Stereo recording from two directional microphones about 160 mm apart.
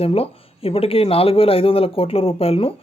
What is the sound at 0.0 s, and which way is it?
Speech, 35° left (ahead or behind).